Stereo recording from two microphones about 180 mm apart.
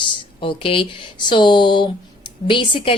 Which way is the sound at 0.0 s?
25° left (ahead or behind).